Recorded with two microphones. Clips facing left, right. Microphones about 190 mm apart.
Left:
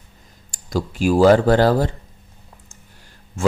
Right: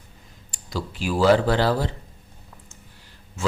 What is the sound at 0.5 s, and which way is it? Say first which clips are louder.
Speech: left 7 dB; 45° left (ahead or behind).